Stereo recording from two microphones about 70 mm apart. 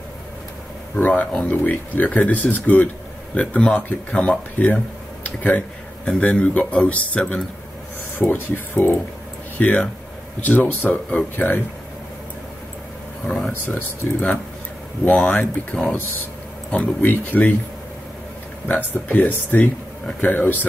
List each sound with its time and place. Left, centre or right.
0.9 s speech: left
13.5 s speech: left
18.7 s speech: left